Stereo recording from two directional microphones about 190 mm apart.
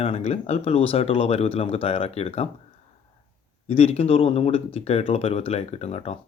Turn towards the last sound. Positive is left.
turn(degrees=35)  # may be behind; listen again after turning